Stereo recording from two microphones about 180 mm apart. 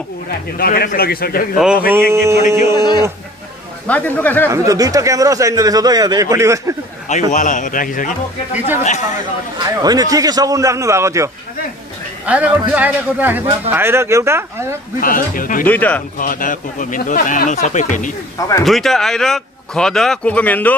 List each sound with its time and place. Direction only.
0.6 s a man's voice: 55° left (ahead or behind)
1.9 s a man's voice: 10° right (ahead or behind)
2.7 s speech: 20° left (ahead or behind)
3.8 s speech: 10° left (ahead or behind)
4.5 s a man's voice: 20° right (ahead or behind)
7.1 s speech: 45° left (ahead or behind)
9.6 s a man's voice: 20° right (ahead or behind)
12.3 s a man's voice: 10° right (ahead or behind)
15.0 s speech: 50° left (ahead or behind)
15.6 s speech: 10° left (ahead or behind)
16.2 s speech: 50° left (ahead or behind)
18.6 s speech: centre (ahead or behind)